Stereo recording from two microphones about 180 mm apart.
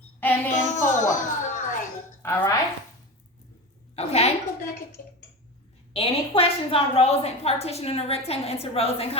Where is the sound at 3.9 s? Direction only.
35° left (ahead or behind).